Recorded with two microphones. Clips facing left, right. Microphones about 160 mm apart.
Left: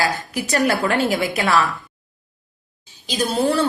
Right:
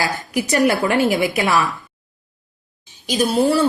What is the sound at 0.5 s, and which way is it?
A woman's voice, 20° right (ahead or behind).